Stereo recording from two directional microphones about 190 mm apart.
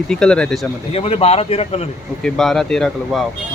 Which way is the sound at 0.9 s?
30° left (ahead or behind).